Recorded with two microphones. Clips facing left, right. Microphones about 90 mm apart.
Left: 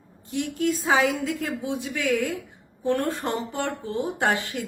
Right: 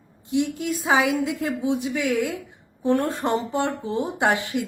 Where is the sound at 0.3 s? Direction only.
15° right (ahead or behind).